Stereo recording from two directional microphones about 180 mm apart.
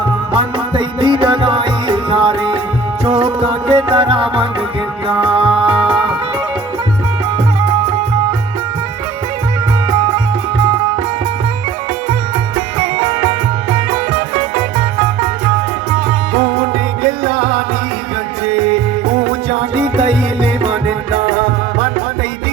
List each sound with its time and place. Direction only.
0.3 s music: 30° right (ahead or behind)
12.5 s music: 30° right (ahead or behind)
15.9 s music: 30° right (ahead or behind)
20.1 s music: 30° right (ahead or behind)